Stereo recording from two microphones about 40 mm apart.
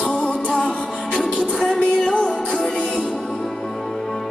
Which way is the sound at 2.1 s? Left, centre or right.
Left.